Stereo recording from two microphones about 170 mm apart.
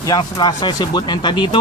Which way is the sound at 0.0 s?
25° left (ahead or behind).